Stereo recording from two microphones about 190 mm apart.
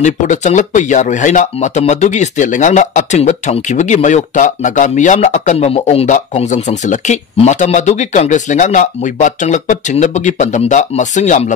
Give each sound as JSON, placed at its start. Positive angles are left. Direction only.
{"t": 0.0, "sound": "speech", "side_deg": 40}